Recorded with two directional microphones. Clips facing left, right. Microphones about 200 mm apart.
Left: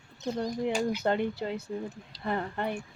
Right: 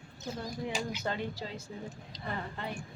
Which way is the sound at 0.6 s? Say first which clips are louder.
Left 7 dB; 55° left (ahead or behind).